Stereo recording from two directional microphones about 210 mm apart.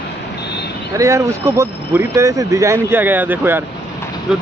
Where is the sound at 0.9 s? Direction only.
15° right (ahead or behind).